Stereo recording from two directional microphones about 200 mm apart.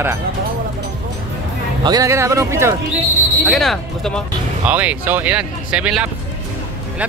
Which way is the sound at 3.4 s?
Centre (ahead or behind).